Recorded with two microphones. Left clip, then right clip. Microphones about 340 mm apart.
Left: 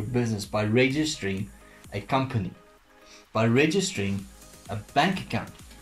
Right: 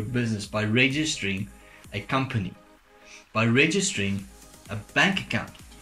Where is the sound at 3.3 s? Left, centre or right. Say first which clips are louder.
Right 1 dB; centre.